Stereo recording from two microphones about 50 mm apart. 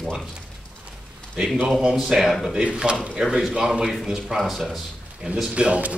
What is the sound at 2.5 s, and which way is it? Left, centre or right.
Speech, centre.